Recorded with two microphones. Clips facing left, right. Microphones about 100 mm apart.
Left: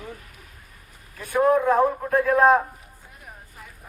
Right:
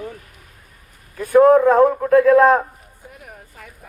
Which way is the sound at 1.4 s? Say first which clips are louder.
Right 6 dB; 80° right.